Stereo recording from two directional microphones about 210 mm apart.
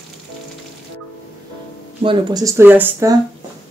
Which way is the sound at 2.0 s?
15° right (ahead or behind).